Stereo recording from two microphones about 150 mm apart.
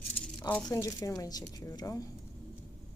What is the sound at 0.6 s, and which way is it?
A woman's voice, 20° left (ahead or behind).